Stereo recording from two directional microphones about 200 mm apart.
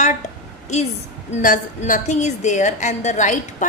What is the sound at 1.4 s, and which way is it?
A woman's voice, 40° left (ahead or behind).